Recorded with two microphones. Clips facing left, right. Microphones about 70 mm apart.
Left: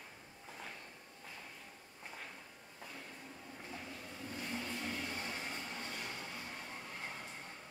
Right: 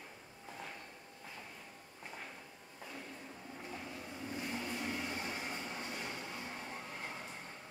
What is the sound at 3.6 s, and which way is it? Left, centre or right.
Vehicle, centre.